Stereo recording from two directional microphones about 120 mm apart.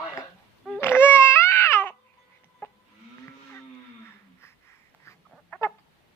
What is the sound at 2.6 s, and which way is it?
Livestock, 20° left (ahead or behind).